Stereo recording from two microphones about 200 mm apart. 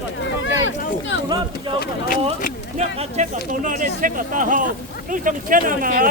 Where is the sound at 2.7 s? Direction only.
35° right (ahead or behind).